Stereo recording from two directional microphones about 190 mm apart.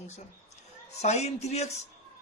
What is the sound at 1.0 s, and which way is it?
Speech, 35° left (ahead or behind).